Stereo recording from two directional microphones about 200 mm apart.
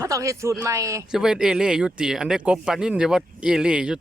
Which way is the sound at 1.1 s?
5° right (ahead or behind).